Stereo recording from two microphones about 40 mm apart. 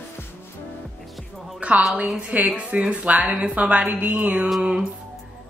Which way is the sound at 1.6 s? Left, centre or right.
Right.